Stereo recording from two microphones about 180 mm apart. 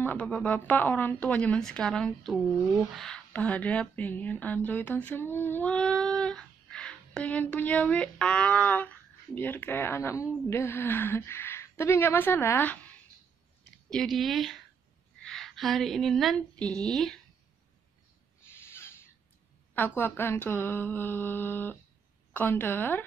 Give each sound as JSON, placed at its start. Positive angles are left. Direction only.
{"t": 0.0, "sound": "a woman's voice", "side_deg": 10}
{"t": 18.4, "sound": "a sound", "side_deg": 15}
{"t": 20.0, "sound": "speech", "side_deg": 10}